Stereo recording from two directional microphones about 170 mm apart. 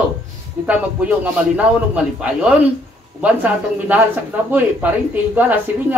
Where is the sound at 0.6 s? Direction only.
10° right (ahead or behind).